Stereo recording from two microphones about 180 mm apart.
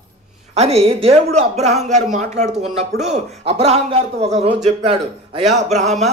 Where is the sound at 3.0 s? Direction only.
40° right (ahead or behind).